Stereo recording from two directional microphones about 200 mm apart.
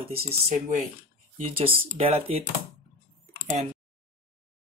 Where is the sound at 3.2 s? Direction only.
35° right (ahead or behind).